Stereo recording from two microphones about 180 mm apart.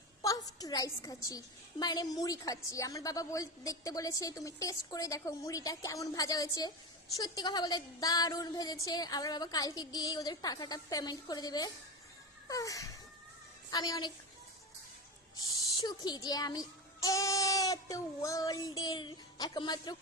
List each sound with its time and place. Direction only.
0.2 s a woman's voice: 20° left (ahead or behind)
15.4 s a woman's voice: 20° left (ahead or behind)